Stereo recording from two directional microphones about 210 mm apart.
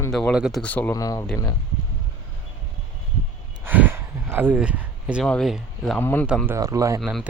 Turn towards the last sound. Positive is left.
turn(degrees=0)  # may be behind; listen again after turning